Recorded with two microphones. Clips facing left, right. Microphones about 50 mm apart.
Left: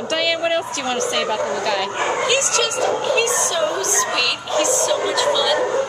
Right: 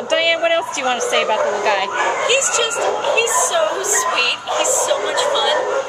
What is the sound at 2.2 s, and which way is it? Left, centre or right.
A woman's voice, centre.